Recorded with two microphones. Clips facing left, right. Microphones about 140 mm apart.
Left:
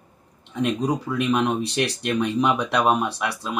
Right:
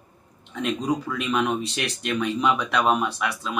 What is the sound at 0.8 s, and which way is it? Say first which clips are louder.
Speech: left 3 dB; 15° left (ahead or behind).